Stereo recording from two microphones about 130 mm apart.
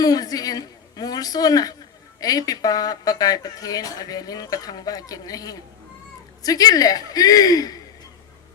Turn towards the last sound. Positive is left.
turn(degrees=30)  # may be behind; listen again after turning